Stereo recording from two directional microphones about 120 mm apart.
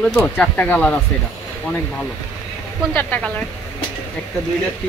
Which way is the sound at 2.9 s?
15° left (ahead or behind).